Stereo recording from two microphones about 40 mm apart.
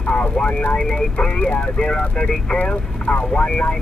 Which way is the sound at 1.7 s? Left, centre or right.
Left.